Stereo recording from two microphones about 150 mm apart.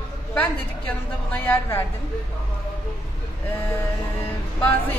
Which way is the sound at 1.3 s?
15° left (ahead or behind).